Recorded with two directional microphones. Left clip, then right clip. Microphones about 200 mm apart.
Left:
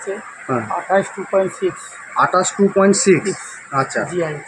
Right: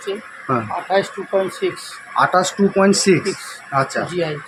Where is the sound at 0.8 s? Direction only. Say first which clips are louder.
Left 2 dB; 15° left (ahead or behind).